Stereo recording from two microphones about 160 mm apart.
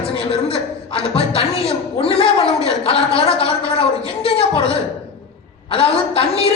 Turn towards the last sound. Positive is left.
turn(degrees=35)  # may be behind; listen again after turning